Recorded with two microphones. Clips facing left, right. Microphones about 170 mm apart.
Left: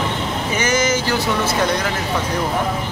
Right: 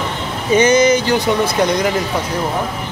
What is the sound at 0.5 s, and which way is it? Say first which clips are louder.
Speech: right 9 dB; 20° right (ahead or behind).